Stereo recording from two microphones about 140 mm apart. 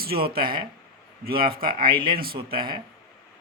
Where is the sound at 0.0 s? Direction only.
90° right.